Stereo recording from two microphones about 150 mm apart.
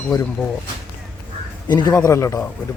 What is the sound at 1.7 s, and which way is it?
Speech, 30° left (ahead or behind).